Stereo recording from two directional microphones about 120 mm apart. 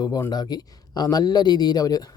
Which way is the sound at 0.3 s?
35° left (ahead or behind).